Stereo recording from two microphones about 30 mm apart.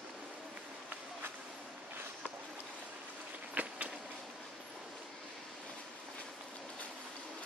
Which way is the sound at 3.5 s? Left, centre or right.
Right.